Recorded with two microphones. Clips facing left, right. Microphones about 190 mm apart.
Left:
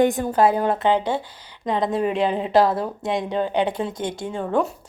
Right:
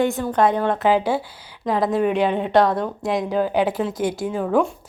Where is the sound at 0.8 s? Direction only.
5° right (ahead or behind).